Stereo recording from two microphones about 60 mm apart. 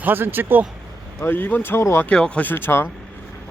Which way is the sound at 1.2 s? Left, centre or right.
Left.